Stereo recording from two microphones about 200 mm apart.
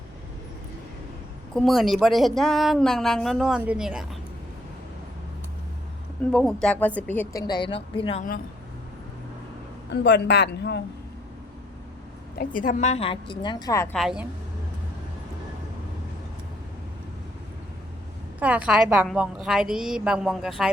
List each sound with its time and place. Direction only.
1.5 s a woman's voice: centre (ahead or behind)
6.3 s speech: 5° left (ahead or behind)
7.4 s a woman's voice: 20° left (ahead or behind)
9.9 s a woman's voice: 60° left (ahead or behind)
12.4 s a woman's voice: 40° left (ahead or behind); by 13.9 s 15° left (ahead or behind)
13.9 s a woman's voice: centre (ahead or behind)
18.3 s a woman's voice: 5° right (ahead or behind)